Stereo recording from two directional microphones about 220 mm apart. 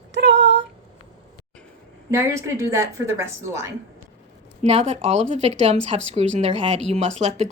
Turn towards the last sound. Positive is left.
turn(degrees=-30)  # may be behind; listen again after turning